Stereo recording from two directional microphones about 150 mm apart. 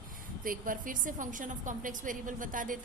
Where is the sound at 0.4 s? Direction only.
65° right (ahead or behind).